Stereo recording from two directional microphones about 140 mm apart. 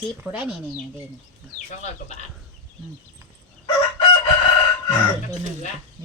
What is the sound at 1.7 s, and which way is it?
Speech, 55° left (ahead or behind).